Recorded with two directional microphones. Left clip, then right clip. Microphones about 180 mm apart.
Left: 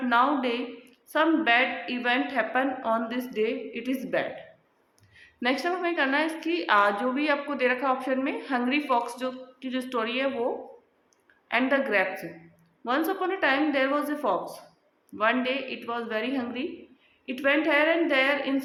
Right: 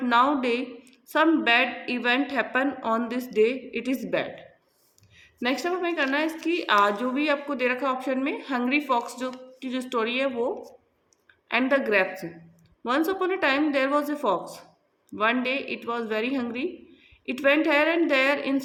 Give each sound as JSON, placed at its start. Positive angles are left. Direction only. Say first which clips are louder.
{"t": 0.0, "sound": "a woman's voice", "louder": "right 2 dB", "side_deg": -40}